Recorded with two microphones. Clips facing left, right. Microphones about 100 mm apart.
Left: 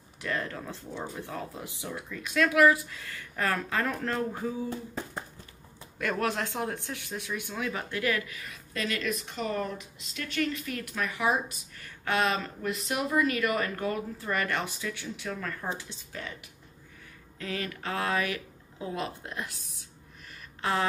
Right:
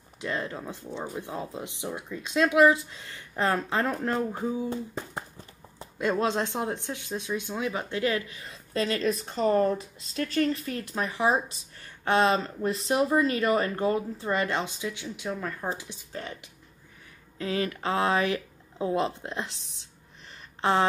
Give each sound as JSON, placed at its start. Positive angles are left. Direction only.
{"t": 0.2, "sound": "speech", "side_deg": -20}
{"t": 16.1, "sound": "speech", "side_deg": -35}
{"t": 17.4, "sound": "speech", "side_deg": -20}